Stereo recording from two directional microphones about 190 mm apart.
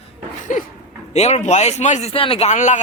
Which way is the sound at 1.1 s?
35° left (ahead or behind).